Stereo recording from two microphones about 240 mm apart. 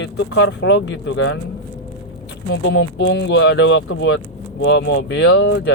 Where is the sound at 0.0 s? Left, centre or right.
Left.